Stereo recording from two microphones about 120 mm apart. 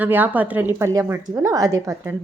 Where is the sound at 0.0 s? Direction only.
15° right (ahead or behind).